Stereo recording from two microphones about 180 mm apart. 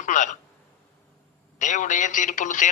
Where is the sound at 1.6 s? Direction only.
45° left (ahead or behind).